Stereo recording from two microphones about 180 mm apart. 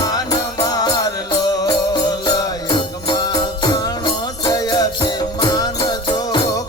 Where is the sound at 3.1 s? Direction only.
25° left (ahead or behind).